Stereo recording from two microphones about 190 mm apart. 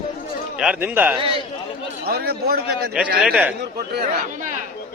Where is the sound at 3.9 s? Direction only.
55° right (ahead or behind).